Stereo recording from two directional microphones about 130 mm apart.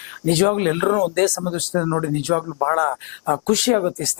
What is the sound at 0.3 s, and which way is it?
Speech, 10° left (ahead or behind).